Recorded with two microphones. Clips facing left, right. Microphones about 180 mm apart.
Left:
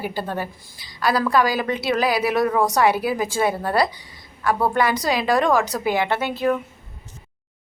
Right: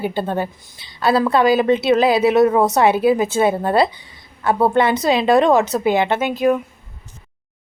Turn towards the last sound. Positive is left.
turn(degrees=-15)  # may be behind; listen again after turning